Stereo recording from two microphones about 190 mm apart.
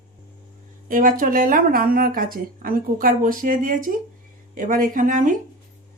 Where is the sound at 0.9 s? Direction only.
45° right (ahead or behind).